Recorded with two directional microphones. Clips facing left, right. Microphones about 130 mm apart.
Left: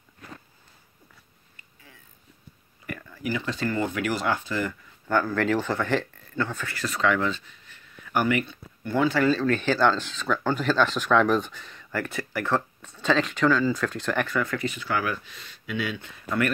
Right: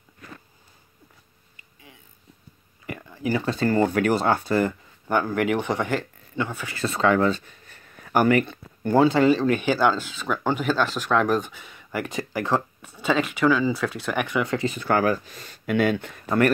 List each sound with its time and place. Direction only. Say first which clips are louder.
2.9 s a sound: right 4 dB; 20° right (ahead or behind)
3.3 s speech: right 7 dB; 35° right (ahead or behind)
5.0 s speech: right 1 dB; 20° right (ahead or behind)
6.8 s speech: right 4 dB; 30° right (ahead or behind)
9.0 s speech: right 3 dB; 25° right (ahead or behind)
14.8 s speech: right 7 dB; 45° right (ahead or behind)